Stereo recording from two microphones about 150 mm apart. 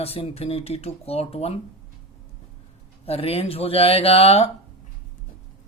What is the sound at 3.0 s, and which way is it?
Speech, 45° left (ahead or behind).